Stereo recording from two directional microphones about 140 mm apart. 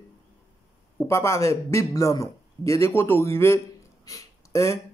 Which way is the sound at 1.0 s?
20° left (ahead or behind).